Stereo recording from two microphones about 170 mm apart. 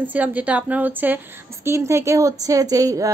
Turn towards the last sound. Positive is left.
turn(degrees=-20)  # may be behind; listen again after turning